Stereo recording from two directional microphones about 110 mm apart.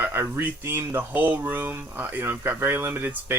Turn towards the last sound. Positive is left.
turn(degrees=-20)  # may be behind; listen again after turning